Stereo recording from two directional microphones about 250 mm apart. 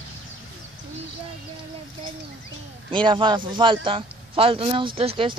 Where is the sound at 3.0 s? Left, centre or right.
Centre.